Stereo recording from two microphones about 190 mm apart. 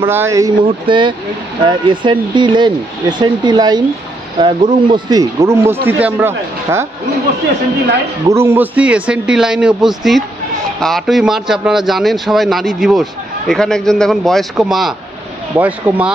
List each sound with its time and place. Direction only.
0.0 s speech: 15° right (ahead or behind)
8.3 s a man's voice: 15° right (ahead or behind)